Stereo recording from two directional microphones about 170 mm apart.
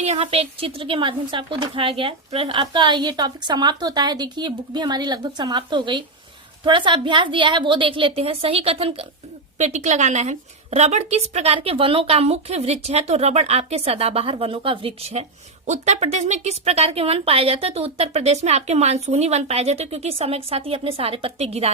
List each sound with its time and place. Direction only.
0.0 s a woman's voice: 40° right (ahead or behind)